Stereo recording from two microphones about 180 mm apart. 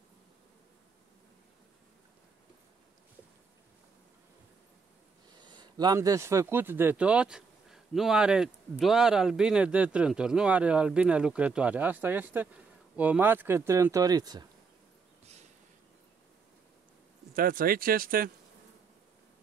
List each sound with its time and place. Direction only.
5.3 s speech: 25° right (ahead or behind)
17.3 s speech: 50° right (ahead or behind)